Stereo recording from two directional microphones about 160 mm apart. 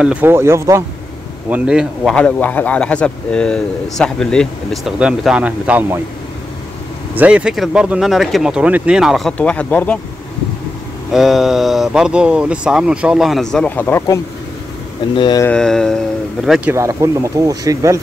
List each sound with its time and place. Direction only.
0.0 s speech: 10° right (ahead or behind)
1.5 s speech: 5° right (ahead or behind)
2.1 s speech: 10° left (ahead or behind); by 5.9 s 10° right (ahead or behind)
7.2 s speech: 10° right (ahead or behind); by 9.9 s 10° left (ahead or behind)
11.1 s speech: centre (ahead or behind); by 14.2 s 15° left (ahead or behind)
15.1 s a sound: 30° left (ahead or behind)
15.4 s speech: 5° left (ahead or behind)
16.7 s speech: 20° right (ahead or behind)